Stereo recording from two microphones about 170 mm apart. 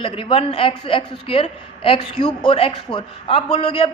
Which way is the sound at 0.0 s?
30° left (ahead or behind).